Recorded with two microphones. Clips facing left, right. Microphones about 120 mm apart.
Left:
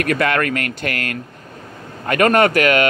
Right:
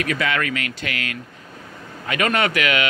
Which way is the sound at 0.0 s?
55° left (ahead or behind).